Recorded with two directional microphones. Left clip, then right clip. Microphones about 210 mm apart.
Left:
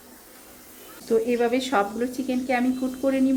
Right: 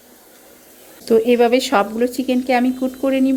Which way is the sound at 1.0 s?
45° right (ahead or behind).